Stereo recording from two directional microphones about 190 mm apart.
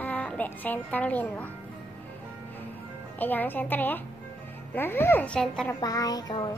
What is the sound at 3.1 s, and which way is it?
A child's voice, 10° left (ahead or behind).